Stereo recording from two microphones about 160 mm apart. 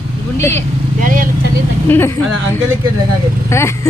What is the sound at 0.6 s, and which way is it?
Speech, 60° right (ahead or behind).